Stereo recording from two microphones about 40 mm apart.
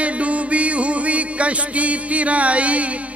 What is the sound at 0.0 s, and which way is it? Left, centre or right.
Music, right.